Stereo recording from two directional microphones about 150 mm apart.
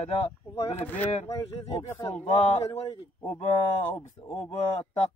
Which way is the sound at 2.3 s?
45° left (ahead or behind).